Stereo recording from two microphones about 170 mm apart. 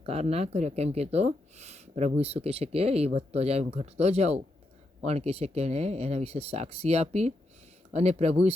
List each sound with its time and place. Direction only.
0.0 s speech: 35° right (ahead or behind)